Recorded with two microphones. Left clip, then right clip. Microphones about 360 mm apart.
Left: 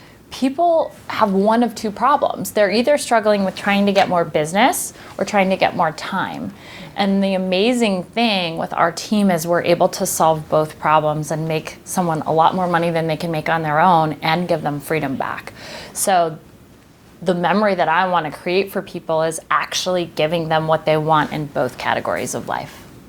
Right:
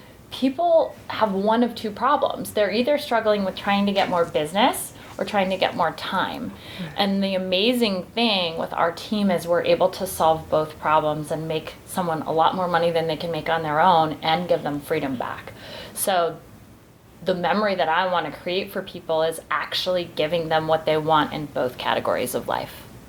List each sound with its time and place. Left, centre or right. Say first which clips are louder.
0.4 s a woman's voice: left 3 dB; left